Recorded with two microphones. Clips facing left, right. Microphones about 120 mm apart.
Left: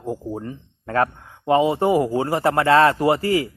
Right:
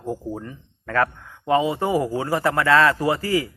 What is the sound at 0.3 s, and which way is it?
Speech, 30° left (ahead or behind).